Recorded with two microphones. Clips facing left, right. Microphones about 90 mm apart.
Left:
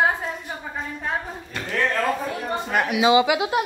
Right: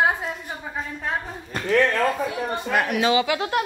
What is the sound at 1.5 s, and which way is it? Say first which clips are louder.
Speech: right 3 dB; 40° right (ahead or behind).